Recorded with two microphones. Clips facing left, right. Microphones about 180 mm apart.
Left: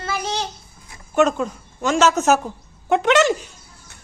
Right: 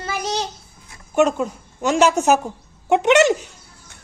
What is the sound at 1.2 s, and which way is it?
A woman's voice, 10° right (ahead or behind).